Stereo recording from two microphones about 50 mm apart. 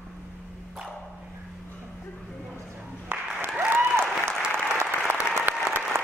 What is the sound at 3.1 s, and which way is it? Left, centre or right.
Applause, right.